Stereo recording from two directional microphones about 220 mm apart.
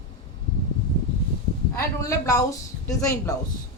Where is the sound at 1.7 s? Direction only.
15° left (ahead or behind).